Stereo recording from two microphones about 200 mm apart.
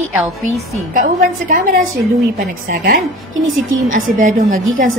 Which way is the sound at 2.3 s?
45° right (ahead or behind).